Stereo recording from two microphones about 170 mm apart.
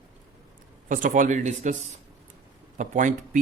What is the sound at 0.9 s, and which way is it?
Speech, 50° right (ahead or behind).